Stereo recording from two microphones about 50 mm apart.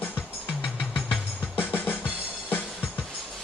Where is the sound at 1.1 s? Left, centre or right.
Left.